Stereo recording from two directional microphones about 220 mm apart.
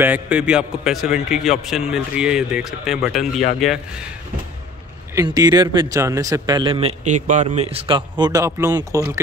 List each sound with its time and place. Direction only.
0.0 s a man's voice: 5° right (ahead or behind)
5.1 s a man's voice: 15° right (ahead or behind)